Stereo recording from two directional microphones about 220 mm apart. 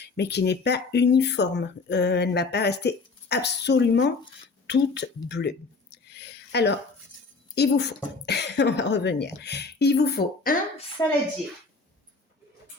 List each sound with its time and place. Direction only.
0.2 s speech: 50° left (ahead or behind)
4.6 s a sound: 50° left (ahead or behind)
7.5 s speech: 50° left (ahead or behind)
11.0 s a woman's voice: 15° left (ahead or behind)